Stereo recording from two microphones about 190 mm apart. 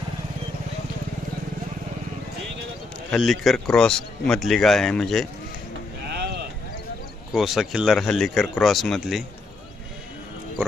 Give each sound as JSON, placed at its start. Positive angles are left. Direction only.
{"t": 3.1, "sound": "speech", "side_deg": 0}
{"t": 6.1, "sound": "sheep", "side_deg": -60}
{"t": 7.3, "sound": "speech", "side_deg": 0}